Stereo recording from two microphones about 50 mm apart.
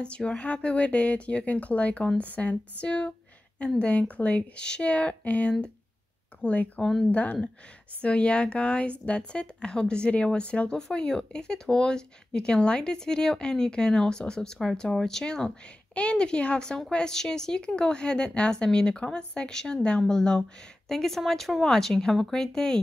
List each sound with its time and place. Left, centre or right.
0.0 s speech: centre
6.8 s speech: centre
7.1 s speech: left; by 15.5 s centre
15.9 s speech: left